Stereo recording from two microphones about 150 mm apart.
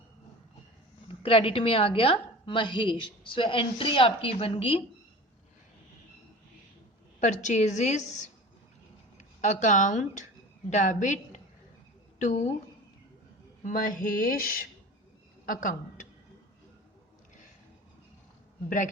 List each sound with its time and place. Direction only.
1.0 s a woman's voice: 35° left (ahead or behind)
7.2 s a woman's voice: 55° left (ahead or behind)
9.1 s a woman's voice: 55° left (ahead or behind)
13.6 s a sound: 60° left (ahead or behind)